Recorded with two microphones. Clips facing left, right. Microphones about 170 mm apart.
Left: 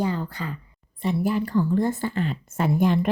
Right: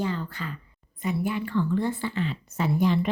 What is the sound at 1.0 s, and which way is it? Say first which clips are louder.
Speech: left 4 dB; 35° left (ahead or behind).